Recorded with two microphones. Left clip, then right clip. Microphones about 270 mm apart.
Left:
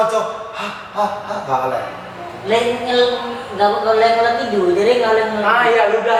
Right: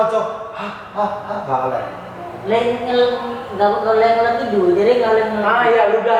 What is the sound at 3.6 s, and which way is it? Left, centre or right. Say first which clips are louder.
Speech: even; centre.